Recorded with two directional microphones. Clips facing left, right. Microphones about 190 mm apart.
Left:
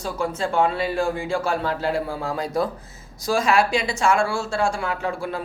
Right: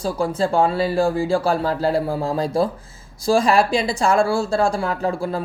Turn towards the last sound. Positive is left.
turn(degrees=-35)  # may be behind; listen again after turning